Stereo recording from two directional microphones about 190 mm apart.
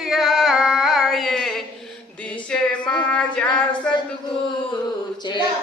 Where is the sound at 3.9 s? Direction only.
5° left (ahead or behind).